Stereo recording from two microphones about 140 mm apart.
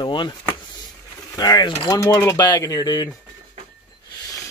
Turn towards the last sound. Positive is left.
turn(degrees=30)  # may be behind; listen again after turning